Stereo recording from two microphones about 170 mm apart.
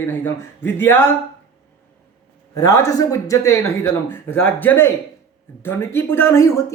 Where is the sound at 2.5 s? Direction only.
20° left (ahead or behind).